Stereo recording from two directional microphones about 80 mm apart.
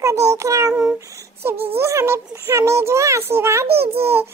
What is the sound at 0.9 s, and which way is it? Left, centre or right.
A child's voice, right.